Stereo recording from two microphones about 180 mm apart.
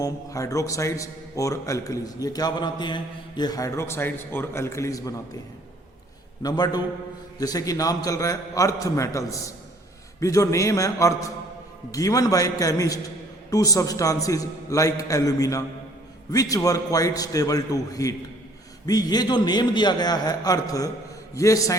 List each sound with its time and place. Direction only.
0.0 s a man's voice: 20° left (ahead or behind)
6.4 s a man's voice: 20° left (ahead or behind)